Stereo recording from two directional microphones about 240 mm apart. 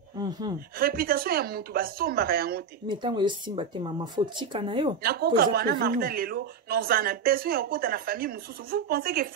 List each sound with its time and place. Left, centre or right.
0.7 s speech: right
2.9 s speech: centre
5.0 s speech: right